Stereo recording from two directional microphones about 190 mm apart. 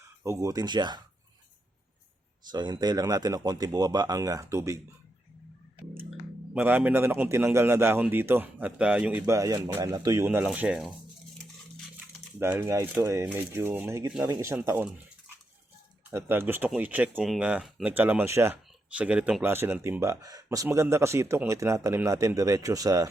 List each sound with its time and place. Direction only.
0.2 s speech: 15° right (ahead or behind)
2.5 s speech: 20° right (ahead or behind)
6.1 s speech: 5° right (ahead or behind)
12.5 s speech: 10° right (ahead or behind)
16.0 s speech: 10° right (ahead or behind)